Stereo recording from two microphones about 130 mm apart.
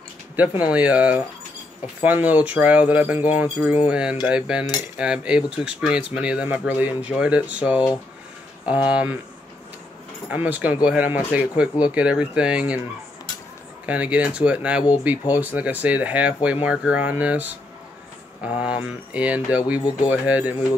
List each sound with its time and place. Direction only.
0.6 s speech: 10° right (ahead or behind)
10.3 s speech: 10° right (ahead or behind)
13.8 s speech: 10° right (ahead or behind)
18.9 s speech: 10° right (ahead or behind)
19.8 s speech: 35° left (ahead or behind)
20.1 s speech: 10° right (ahead or behind)